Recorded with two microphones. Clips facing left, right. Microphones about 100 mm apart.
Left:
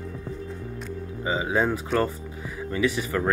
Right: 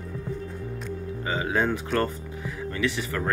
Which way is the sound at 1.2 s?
20° left (ahead or behind).